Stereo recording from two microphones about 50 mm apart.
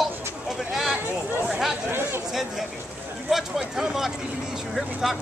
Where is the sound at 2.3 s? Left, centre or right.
Centre.